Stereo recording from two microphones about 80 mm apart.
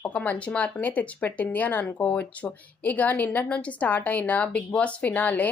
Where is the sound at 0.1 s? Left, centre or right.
Centre.